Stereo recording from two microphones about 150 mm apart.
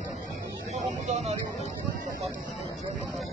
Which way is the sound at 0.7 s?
50° right (ahead or behind).